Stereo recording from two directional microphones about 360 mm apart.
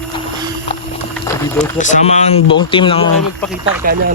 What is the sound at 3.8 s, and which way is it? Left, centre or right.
Speech, right.